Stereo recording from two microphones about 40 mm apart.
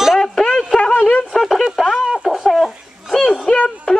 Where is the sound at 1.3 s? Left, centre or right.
Centre.